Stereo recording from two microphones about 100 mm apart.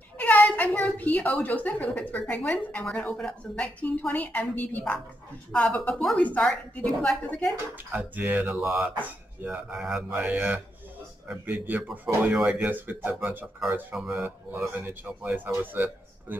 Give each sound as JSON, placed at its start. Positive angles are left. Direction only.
{"t": 0.2, "sound": "a woman's voice", "side_deg": 15}
{"t": 7.7, "sound": "speech", "side_deg": -20}
{"t": 8.5, "sound": "speech", "side_deg": -5}
{"t": 9.0, "sound": "speech", "side_deg": -15}
{"t": 13.9, "sound": "speech", "side_deg": -5}
{"t": 14.8, "sound": "a man's voice", "side_deg": -20}